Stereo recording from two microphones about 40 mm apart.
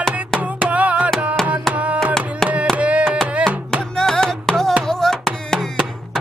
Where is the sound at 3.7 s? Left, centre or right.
Centre.